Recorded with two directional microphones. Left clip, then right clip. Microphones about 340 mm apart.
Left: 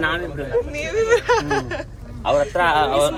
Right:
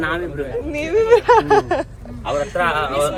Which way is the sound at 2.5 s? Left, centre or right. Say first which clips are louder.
Left 2 dB; left.